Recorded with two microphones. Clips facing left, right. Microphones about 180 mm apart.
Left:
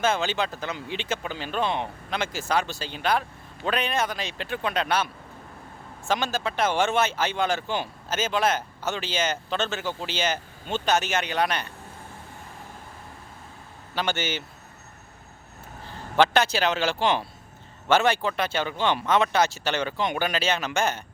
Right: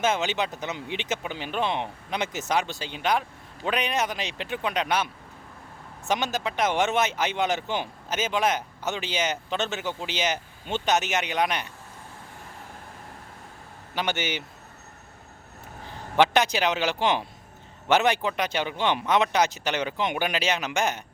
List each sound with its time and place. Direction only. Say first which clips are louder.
0.0 s speech: even; 15° right (ahead or behind)
6.1 s speech: even; 20° right (ahead or behind)
13.9 s speech: left 1 dB; 15° right (ahead or behind)
16.1 s speech: even; 15° right (ahead or behind)